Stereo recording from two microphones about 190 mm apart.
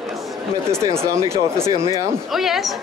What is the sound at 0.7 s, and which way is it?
Speech, 15° right (ahead or behind).